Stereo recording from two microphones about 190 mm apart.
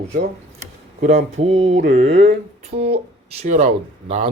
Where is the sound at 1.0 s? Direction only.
35° right (ahead or behind).